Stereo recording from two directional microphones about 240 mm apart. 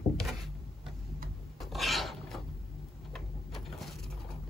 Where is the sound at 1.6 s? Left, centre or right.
Centre.